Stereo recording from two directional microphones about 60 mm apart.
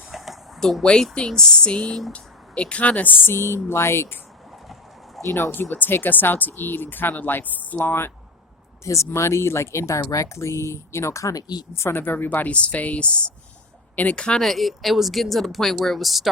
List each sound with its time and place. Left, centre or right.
0.1 s a sound: centre
0.6 s speech: centre; by 3.3 s left
3.3 s speech: left
5.5 s speech: left
8.8 s speech: left
11.8 s speech: left
14.2 s speech: centre
14.4 s speech: centre